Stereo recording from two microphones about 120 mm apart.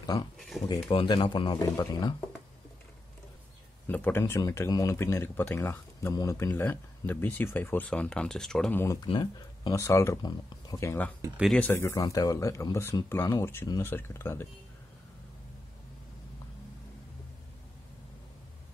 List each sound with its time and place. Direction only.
0.0 s speech: 35° left (ahead or behind)
0.4 s speech: centre (ahead or behind)
0.7 s speech: 50° left (ahead or behind); by 2.2 s 30° left (ahead or behind)
3.8 s speech: 15° left (ahead or behind)
6.5 s speech: 15° left (ahead or behind)
8.7 s speech: 25° left (ahead or behind)
9.0 s speech: 40° left (ahead or behind)
9.8 s speech: 25° left (ahead or behind)
11.5 s speech: 15° left (ahead or behind)